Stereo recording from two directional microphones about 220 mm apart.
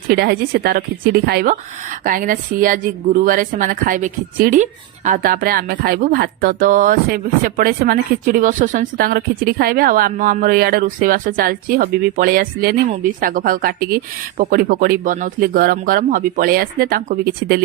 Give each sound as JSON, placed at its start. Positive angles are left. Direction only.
{"t": 0.1, "sound": "speech", "side_deg": -45}